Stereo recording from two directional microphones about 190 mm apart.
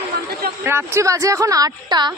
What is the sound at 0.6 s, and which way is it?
A woman's voice, 15° right (ahead or behind).